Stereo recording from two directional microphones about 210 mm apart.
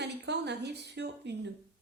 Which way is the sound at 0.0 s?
55° right (ahead or behind).